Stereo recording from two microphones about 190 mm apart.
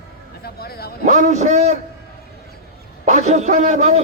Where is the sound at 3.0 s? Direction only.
40° right (ahead or behind).